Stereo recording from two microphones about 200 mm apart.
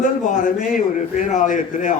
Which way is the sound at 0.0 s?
40° left (ahead or behind).